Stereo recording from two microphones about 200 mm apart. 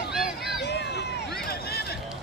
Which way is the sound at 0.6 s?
55° left (ahead or behind).